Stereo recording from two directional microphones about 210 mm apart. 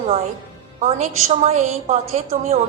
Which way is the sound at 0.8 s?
30° right (ahead or behind).